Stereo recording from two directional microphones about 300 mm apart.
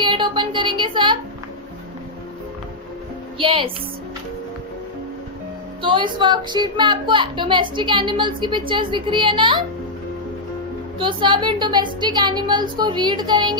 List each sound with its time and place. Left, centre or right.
0.0 s speech: centre
3.3 s a woman's voice: centre
5.8 s a woman's voice: centre
11.0 s a woman's voice: centre